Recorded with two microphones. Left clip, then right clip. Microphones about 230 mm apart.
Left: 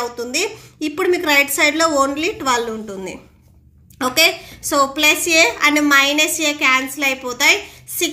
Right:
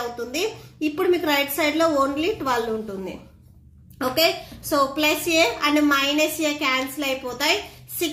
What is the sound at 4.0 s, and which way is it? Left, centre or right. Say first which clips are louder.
A woman's voice: left 5 dB; left.